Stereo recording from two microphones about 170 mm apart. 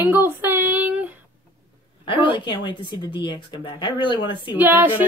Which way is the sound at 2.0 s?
30° left (ahead or behind).